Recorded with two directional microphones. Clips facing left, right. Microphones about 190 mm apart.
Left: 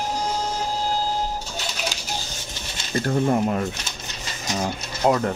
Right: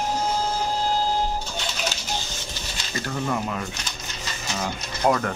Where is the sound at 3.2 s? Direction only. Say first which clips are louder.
Left 4 dB; 35° left (ahead or behind).